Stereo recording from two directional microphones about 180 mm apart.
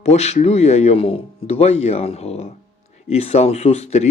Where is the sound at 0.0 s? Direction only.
40° left (ahead or behind).